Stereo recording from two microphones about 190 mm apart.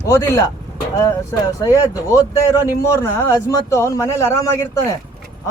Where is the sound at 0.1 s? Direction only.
15° left (ahead or behind).